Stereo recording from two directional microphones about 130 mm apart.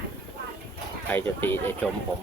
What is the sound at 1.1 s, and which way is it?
Speech, 15° left (ahead or behind).